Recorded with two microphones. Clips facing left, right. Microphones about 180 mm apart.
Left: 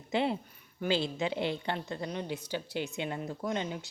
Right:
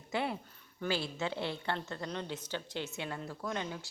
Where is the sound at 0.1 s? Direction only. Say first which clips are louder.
Left 5 dB; 25° left (ahead or behind).